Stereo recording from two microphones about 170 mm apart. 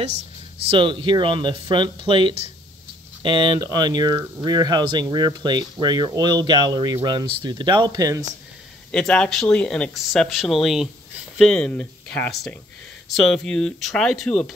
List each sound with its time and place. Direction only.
0.7 s speech: 30° right (ahead or behind)
8.9 s speech: 5° left (ahead or behind)